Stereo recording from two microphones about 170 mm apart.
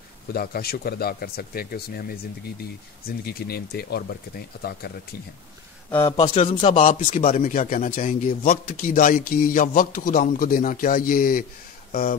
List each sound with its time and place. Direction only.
0.3 s speech: 65° left (ahead or behind)
5.9 s a man's voice: 15° left (ahead or behind)
6.3 s speech: 35° left (ahead or behind)
6.9 s a man's voice: 50° left (ahead or behind)